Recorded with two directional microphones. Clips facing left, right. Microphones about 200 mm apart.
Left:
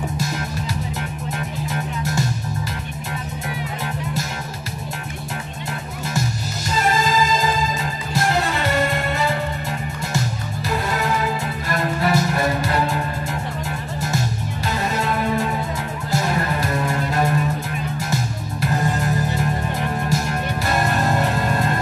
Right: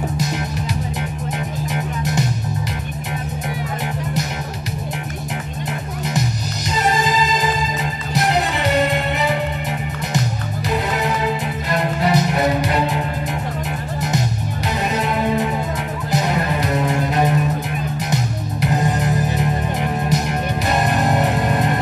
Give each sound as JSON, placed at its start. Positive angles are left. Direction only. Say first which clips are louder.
{"t": 6.7, "sound": "music", "louder": "right 1 dB", "side_deg": -20}
{"t": 10.7, "sound": "music", "louder": "right 1 dB", "side_deg": -20}
{"t": 14.7, "sound": "music", "louder": "right 2 dB", "side_deg": -20}